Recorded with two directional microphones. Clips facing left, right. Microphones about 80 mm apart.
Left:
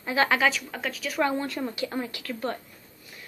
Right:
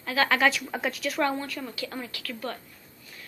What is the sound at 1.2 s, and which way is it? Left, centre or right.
Speech, centre.